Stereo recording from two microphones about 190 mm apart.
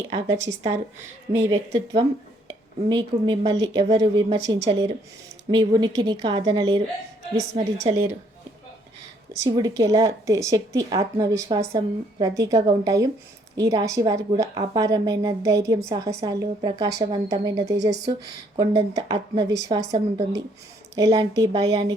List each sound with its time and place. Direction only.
0.1 s a woman's voice: 15° right (ahead or behind); by 7.9 s 30° right (ahead or behind)
9.4 s a woman's voice: 20° right (ahead or behind)